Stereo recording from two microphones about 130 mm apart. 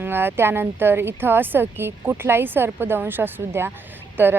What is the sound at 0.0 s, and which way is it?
Speech, 15° right (ahead or behind).